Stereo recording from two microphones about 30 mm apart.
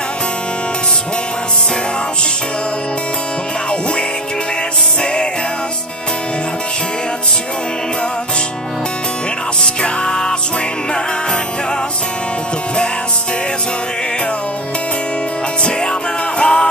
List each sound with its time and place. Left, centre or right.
9.6 s music: left
15.6 s music: left